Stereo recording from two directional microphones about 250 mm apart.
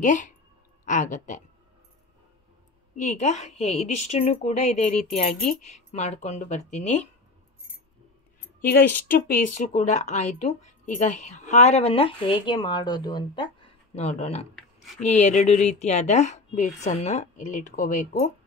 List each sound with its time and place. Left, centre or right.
0.0 s speech: left
3.0 s speech: left
5.6 s speech: left
5.9 s speech: left
9.0 s speech: left